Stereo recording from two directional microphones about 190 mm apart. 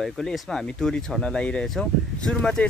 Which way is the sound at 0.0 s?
Centre (ahead or behind).